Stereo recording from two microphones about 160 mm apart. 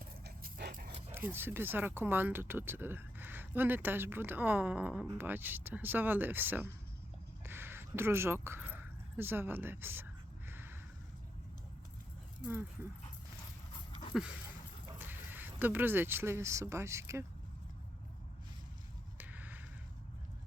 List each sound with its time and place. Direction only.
0.3 s dog: 70° right (ahead or behind)
1.1 s speech: 15° right (ahead or behind)
10.5 s a sound: 15° right (ahead or behind)
13.7 s dog: 30° left (ahead or behind)
14.1 s dog: 5° right (ahead or behind)
14.9 s speech: 15° right (ahead or behind)
19.1 s a sound: 10° right (ahead or behind)